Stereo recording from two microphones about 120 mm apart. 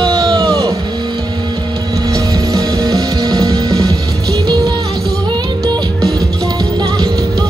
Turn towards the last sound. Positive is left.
turn(degrees=-30)  # may be behind; listen again after turning